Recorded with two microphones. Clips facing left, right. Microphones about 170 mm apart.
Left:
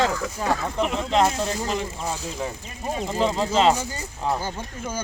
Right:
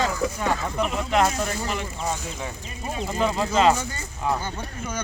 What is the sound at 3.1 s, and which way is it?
Speech, 25° left (ahead or behind).